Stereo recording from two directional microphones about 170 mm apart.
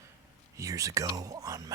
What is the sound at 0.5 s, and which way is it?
Speech, 20° right (ahead or behind).